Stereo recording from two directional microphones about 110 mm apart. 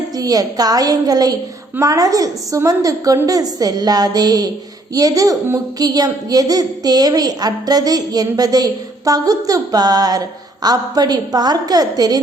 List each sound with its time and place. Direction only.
0.2 s a woman's voice: 35° right (ahead or behind)